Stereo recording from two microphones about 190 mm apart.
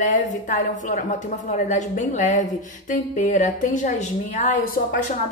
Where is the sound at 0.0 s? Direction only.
40° left (ahead or behind).